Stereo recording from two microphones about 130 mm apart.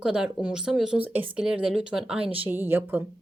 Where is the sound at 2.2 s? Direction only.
45° right (ahead or behind).